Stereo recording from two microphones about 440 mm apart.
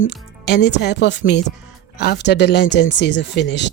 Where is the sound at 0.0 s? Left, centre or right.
Left.